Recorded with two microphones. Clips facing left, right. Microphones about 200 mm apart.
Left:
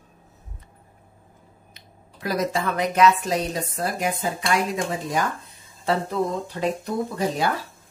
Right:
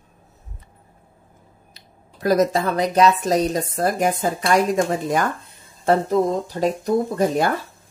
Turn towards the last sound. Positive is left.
turn(degrees=-50)  # may be behind; listen again after turning